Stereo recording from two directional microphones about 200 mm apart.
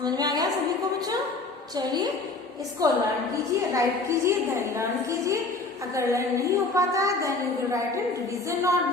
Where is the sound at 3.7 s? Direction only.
15° right (ahead or behind).